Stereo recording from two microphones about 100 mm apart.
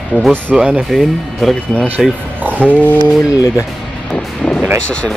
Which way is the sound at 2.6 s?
15° left (ahead or behind).